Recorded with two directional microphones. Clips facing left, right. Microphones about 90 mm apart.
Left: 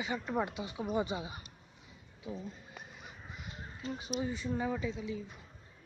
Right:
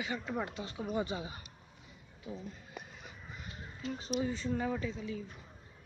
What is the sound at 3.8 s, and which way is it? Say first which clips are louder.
Speech: even; 40° left (ahead or behind).